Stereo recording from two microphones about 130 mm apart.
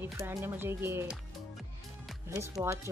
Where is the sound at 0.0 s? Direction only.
20° right (ahead or behind).